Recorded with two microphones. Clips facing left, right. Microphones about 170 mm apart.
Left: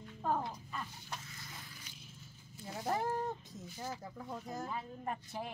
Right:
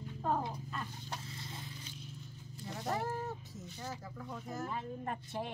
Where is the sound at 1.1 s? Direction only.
30° right (ahead or behind).